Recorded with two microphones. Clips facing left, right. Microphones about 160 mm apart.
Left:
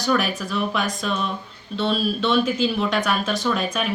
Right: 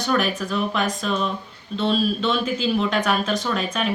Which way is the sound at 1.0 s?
35° right (ahead or behind).